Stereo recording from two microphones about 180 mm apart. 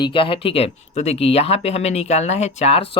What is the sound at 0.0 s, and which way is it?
Speech, 30° left (ahead or behind).